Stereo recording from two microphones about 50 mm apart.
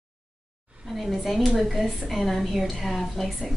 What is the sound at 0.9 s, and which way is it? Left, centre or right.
A woman's voice, centre.